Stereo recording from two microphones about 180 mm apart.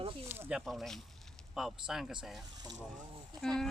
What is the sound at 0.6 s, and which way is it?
Speech, centre (ahead or behind).